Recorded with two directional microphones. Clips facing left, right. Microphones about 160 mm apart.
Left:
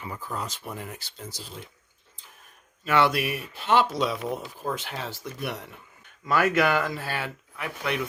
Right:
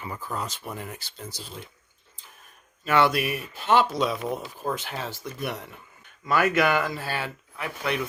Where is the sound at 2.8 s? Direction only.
45° right (ahead or behind).